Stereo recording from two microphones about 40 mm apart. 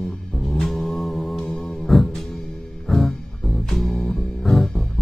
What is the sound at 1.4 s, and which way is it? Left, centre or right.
Music, left.